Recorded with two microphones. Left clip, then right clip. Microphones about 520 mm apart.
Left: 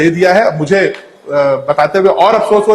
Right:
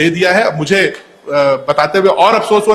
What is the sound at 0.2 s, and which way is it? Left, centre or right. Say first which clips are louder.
A man's voice: left 2 dB; right.